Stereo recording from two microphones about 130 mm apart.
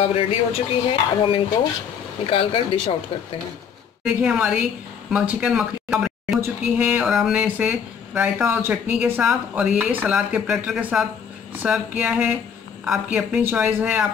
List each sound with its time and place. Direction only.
0.1 s speech: 45° left (ahead or behind)
4.0 s speech: 5° right (ahead or behind)